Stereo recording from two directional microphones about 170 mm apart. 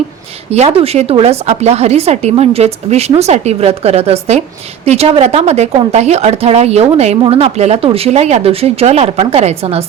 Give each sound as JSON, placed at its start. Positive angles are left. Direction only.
{"t": 0.5, "sound": "a woman's voice", "side_deg": -35}